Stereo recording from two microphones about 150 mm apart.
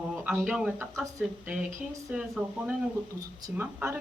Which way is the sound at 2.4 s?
5° right (ahead or behind).